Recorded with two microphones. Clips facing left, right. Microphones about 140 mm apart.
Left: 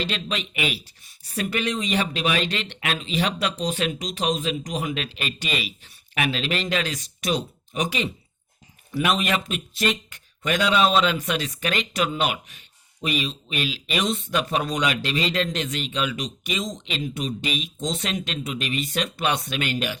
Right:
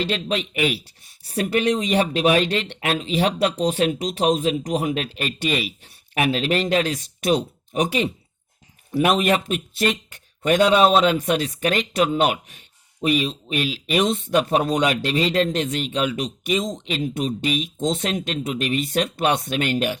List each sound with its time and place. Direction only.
0.0 s speech: 55° right (ahead or behind)